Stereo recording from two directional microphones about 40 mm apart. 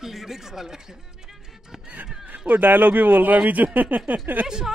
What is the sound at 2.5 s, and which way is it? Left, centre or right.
A man's voice, right.